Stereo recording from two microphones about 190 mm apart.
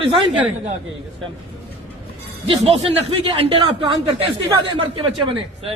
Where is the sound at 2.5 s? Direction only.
30° right (ahead or behind).